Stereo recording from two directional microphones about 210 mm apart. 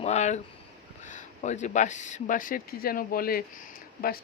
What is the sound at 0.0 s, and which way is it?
Speech, 30° left (ahead or behind).